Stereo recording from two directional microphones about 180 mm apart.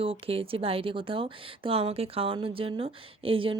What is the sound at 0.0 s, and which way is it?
A woman's voice, 30° right (ahead or behind).